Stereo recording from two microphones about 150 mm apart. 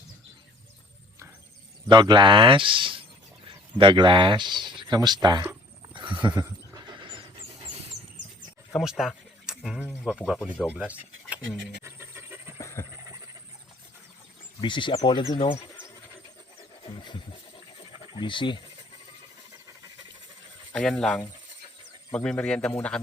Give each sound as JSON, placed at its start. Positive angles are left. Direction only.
{"t": 1.9, "sound": "speech", "side_deg": -30}
{"t": 5.9, "sound": "a sound", "side_deg": -35}
{"t": 6.4, "sound": "squeal", "side_deg": -25}
{"t": 8.7, "sound": "speech", "side_deg": -5}
{"t": 11.8, "sound": "pant", "side_deg": -15}
{"t": 12.5, "sound": "train", "side_deg": 20}
{"t": 13.1, "sound": "a sound", "side_deg": -20}
{"t": 14.6, "sound": "speech", "side_deg": 30}
{"t": 17.0, "sound": "speech", "side_deg": 30}
{"t": 20.7, "sound": "speech", "side_deg": 5}